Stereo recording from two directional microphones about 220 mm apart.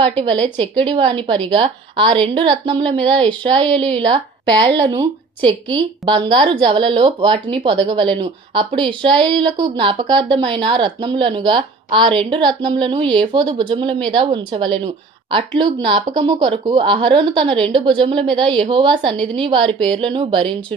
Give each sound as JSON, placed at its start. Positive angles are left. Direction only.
{"t": 0.0, "sound": "a woman's voice", "side_deg": -25}